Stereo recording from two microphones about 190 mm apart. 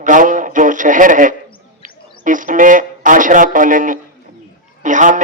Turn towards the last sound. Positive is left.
turn(degrees=-40)  # may be behind; listen again after turning